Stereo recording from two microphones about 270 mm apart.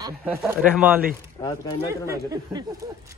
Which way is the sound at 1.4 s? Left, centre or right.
Centre.